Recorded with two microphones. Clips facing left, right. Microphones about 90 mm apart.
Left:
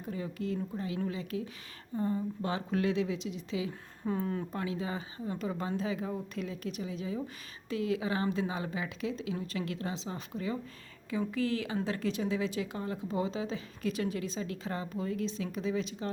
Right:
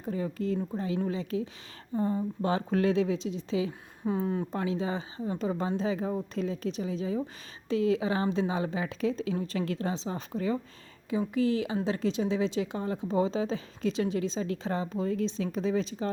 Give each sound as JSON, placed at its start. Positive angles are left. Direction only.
{"t": 0.0, "sound": "a woman's voice", "side_deg": -35}
{"t": 2.5, "sound": "a woman's voice", "side_deg": -35}
{"t": 4.0, "sound": "speech", "side_deg": -15}
{"t": 4.5, "sound": "a woman's voice", "side_deg": -30}
{"t": 11.1, "sound": "a woman's voice", "side_deg": -20}